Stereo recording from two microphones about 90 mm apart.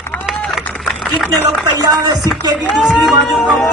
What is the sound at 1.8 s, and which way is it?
Speech, 45° right (ahead or behind).